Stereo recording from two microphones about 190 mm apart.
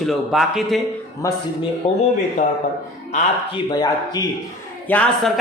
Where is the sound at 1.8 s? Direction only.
40° left (ahead or behind).